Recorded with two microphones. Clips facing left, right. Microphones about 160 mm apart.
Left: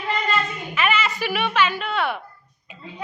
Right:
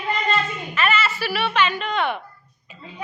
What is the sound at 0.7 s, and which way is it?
Speech, 10° left (ahead or behind).